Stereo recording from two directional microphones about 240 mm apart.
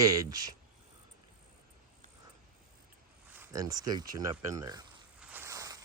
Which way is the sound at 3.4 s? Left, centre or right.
Centre.